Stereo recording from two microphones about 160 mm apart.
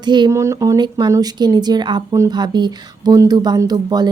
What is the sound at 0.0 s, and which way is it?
Speech, 25° right (ahead or behind).